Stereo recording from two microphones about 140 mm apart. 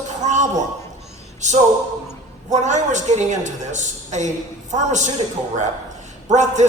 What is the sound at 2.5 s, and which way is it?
A man's voice, 60° right (ahead or behind).